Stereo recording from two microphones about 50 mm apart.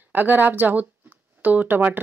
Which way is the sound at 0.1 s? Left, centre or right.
Right.